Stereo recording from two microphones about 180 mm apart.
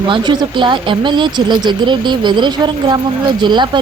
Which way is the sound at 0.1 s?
25° right (ahead or behind).